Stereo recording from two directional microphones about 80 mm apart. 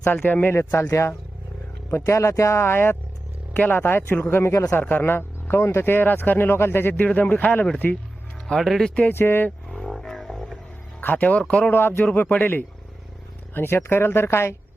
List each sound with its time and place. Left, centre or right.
0.0 s speech: left
8.4 s speech: centre
9.1 s speech: left
9.7 s a sound: centre
11.0 s speech: left
11.7 s speech: left